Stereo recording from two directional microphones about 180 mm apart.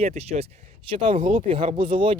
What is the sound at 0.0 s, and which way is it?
A man's voice, 35° right (ahead or behind).